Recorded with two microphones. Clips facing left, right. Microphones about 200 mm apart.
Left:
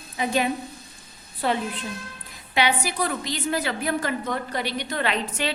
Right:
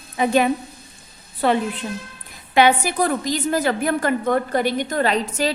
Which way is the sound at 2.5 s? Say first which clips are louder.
Right 7 dB; 50° right (ahead or behind).